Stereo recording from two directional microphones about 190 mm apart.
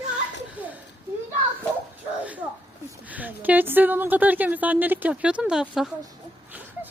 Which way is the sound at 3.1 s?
10° right (ahead or behind).